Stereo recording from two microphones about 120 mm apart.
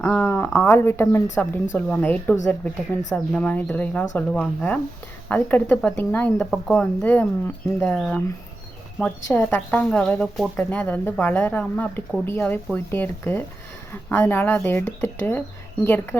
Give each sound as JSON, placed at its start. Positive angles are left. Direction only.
{"t": 0.0, "sound": "a woman's voice", "side_deg": 15}
{"t": 3.3, "sound": "speech", "side_deg": 10}
{"t": 6.5, "sound": "speech", "side_deg": 0}
{"t": 7.0, "sound": "speech", "side_deg": 15}
{"t": 7.9, "sound": "speech", "side_deg": 0}
{"t": 9.0, "sound": "speech", "side_deg": 15}